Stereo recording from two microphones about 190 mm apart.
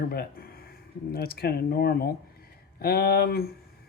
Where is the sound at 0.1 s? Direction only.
55° left (ahead or behind).